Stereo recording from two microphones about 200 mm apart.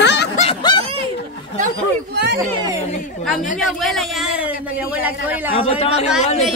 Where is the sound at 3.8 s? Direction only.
Centre (ahead or behind).